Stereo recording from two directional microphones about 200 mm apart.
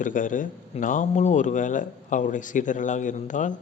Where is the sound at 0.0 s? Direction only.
40° left (ahead or behind).